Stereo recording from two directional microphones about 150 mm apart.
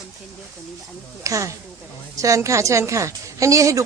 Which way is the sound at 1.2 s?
20° right (ahead or behind).